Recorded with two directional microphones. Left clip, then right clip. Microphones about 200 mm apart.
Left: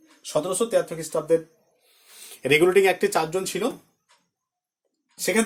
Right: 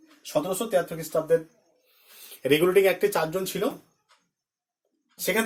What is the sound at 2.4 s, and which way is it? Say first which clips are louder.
Speech: left 2 dB; 45° left (ahead or behind).